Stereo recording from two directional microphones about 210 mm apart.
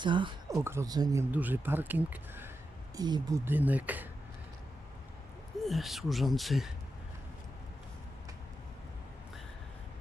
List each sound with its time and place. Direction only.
0.0 s speech: 25° right (ahead or behind)
0.6 s speech: 10° right (ahead or behind)
1.3 s speech: 10° right (ahead or behind)
5.6 s speech: centre (ahead or behind)